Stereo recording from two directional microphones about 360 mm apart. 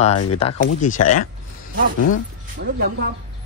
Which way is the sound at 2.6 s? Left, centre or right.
Right.